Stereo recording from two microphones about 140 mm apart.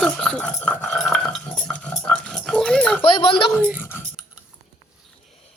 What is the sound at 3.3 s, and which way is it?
Speech, 5° left (ahead or behind).